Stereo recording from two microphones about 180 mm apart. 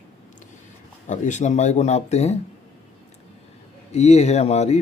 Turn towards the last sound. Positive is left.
turn(degrees=35)  # may be behind; listen again after turning